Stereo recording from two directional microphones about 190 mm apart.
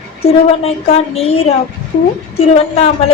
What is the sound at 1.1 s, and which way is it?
Speech, 30° left (ahead or behind).